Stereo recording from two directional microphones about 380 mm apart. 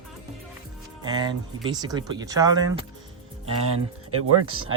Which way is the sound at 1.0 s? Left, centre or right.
Centre.